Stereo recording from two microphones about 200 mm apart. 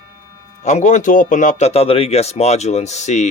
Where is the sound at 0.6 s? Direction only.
35° left (ahead or behind).